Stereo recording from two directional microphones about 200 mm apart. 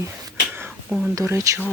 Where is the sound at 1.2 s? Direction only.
15° right (ahead or behind).